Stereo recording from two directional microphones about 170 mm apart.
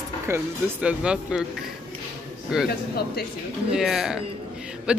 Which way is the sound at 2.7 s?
65° left (ahead or behind).